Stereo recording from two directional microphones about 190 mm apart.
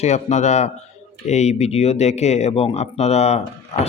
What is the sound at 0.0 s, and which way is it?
A man's voice, 35° left (ahead or behind).